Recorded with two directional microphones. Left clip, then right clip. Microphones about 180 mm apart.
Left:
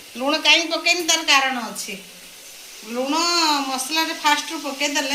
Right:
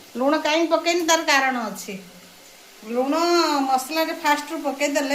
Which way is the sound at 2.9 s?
65° right (ahead or behind).